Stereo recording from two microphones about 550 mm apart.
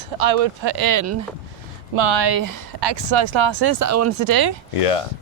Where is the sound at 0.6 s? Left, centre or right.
Right.